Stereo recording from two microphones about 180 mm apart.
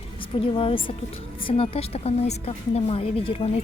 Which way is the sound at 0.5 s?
30° left (ahead or behind).